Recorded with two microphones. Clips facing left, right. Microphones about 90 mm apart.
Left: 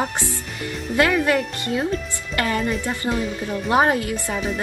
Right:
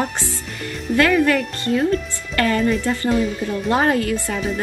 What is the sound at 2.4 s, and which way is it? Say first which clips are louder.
Speech: right 4 dB; 20° left (ahead or behind).